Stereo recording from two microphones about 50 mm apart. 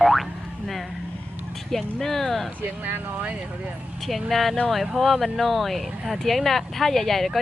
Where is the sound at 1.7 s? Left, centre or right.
Centre.